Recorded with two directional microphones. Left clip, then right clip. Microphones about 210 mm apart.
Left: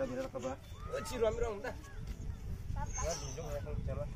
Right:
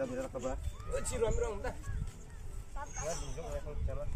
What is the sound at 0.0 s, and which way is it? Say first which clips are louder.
Speech: right 1 dB; 25° right (ahead or behind).